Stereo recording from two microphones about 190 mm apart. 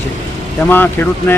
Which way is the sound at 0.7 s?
10° left (ahead or behind).